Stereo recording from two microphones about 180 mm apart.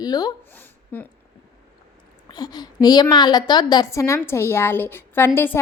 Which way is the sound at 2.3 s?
25° left (ahead or behind).